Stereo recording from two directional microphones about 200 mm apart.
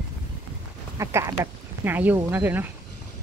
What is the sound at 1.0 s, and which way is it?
Speech, 15° right (ahead or behind).